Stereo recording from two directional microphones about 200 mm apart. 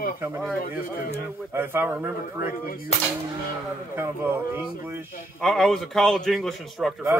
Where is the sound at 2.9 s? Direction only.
30° left (ahead or behind).